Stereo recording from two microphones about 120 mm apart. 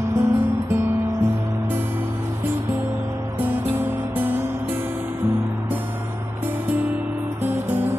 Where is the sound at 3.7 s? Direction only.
15° right (ahead or behind).